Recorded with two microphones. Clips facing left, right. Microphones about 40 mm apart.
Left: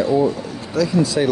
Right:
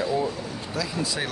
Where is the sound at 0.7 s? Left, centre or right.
Centre.